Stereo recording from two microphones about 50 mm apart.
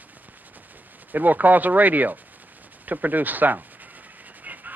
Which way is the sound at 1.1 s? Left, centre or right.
Right.